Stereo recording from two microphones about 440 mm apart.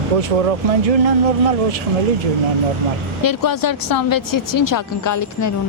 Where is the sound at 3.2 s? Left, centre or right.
Left.